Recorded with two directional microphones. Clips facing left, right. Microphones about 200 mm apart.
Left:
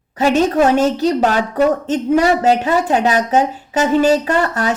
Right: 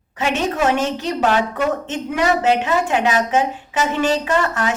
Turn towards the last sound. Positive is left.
turn(degrees=40)  # may be behind; listen again after turning